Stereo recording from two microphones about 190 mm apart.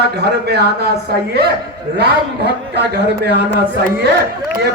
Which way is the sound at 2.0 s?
60° right (ahead or behind).